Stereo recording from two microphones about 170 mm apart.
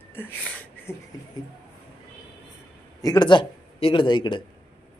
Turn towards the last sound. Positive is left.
turn(degrees=25)  # may be behind; listen again after turning